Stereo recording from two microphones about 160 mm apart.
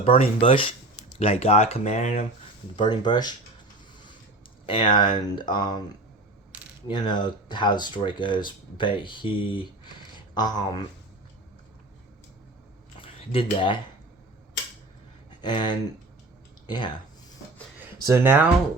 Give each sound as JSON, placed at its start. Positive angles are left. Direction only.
{"t": 0.0, "sound": "speech", "side_deg": 35}
{"t": 2.7, "sound": "speech", "side_deg": 25}
{"t": 4.6, "sound": "speech", "side_deg": 30}
{"t": 6.8, "sound": "speech", "side_deg": 30}
{"t": 13.0, "sound": "a sound", "side_deg": 35}
{"t": 15.4, "sound": "speech", "side_deg": 30}
{"t": 17.7, "sound": "speech", "side_deg": -15}